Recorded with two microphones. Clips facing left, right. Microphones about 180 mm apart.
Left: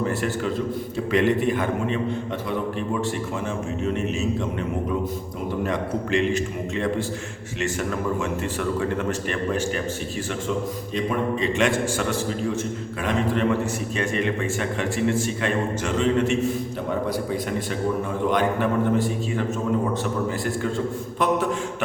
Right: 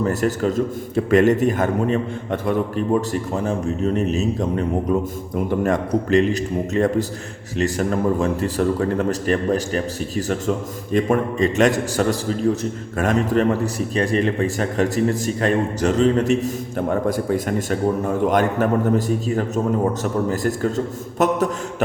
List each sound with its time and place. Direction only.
0.0 s a man's voice: 40° right (ahead or behind)
5.6 s a man's voice: 45° right (ahead or behind)